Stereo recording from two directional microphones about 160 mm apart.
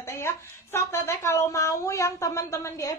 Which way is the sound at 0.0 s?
15° left (ahead or behind).